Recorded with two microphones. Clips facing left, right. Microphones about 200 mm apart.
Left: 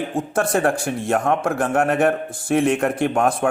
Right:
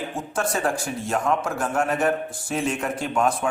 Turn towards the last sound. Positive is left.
turn(degrees=55)  # may be behind; listen again after turning